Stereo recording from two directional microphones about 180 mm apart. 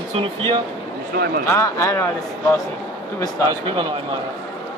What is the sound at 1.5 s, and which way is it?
Speech, 15° left (ahead or behind).